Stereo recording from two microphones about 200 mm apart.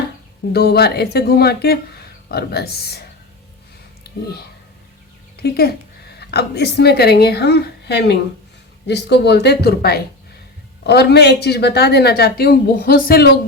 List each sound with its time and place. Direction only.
0.5 s speech: 55° left (ahead or behind)
4.1 s a sound: 50° left (ahead or behind)
5.4 s a woman's voice: 50° left (ahead or behind)